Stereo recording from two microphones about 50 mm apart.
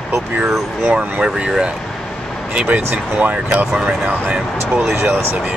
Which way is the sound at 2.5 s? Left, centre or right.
Right.